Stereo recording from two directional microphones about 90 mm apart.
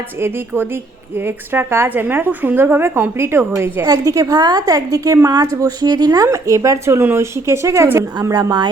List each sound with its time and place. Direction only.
0.2 s speech: 25° right (ahead or behind)
3.8 s speech: 40° right (ahead or behind)
6.2 s speech: 35° right (ahead or behind)
8.3 s speech: 50° right (ahead or behind)